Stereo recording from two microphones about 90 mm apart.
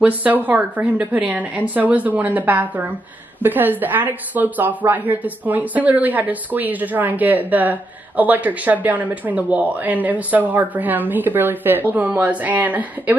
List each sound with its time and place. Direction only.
0.0 s a woman's voice: 15° right (ahead or behind)